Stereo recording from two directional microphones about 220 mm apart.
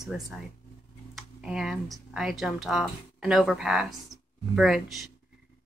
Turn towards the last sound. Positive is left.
turn(degrees=0)  # may be behind; listen again after turning